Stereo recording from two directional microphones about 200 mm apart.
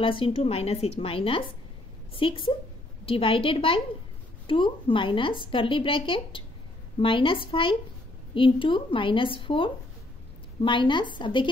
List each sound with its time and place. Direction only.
0.0 s a woman's voice: 25° left (ahead or behind)